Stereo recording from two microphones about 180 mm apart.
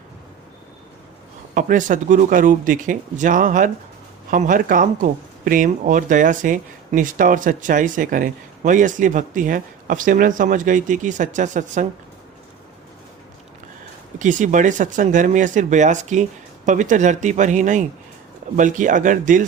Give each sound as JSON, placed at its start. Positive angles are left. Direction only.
{"t": 1.5, "sound": "speech", "side_deg": -45}
{"t": 14.2, "sound": "speech", "side_deg": -45}